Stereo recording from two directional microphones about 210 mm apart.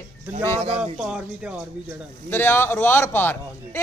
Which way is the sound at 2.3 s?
10° left (ahead or behind).